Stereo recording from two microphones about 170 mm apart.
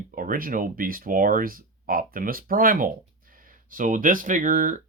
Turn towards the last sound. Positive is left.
turn(degrees=-50)  # may be behind; listen again after turning